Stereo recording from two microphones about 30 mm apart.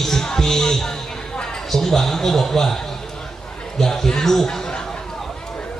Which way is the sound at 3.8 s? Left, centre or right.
Centre.